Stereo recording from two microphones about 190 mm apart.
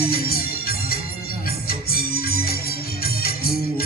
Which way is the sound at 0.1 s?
50° left (ahead or behind).